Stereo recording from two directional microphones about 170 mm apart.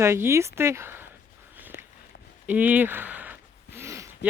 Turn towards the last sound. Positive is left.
turn(degrees=-15)  # may be behind; listen again after turning